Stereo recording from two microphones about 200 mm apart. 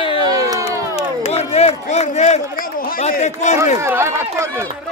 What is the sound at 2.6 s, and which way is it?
Chatter, 45° left (ahead or behind).